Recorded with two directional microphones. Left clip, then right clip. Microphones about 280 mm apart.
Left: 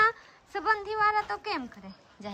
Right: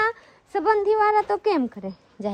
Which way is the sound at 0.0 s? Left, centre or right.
Centre.